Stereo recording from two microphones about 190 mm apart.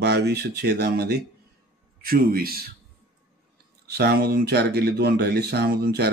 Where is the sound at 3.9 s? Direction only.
55° right (ahead or behind).